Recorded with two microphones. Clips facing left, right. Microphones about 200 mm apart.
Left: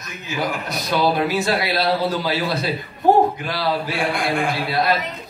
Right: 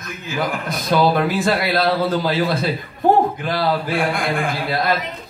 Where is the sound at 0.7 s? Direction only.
50° right (ahead or behind).